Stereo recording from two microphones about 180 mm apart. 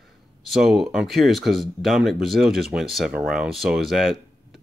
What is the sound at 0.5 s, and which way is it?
Speech, centre (ahead or behind).